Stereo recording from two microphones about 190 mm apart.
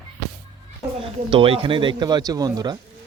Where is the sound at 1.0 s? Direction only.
30° right (ahead or behind).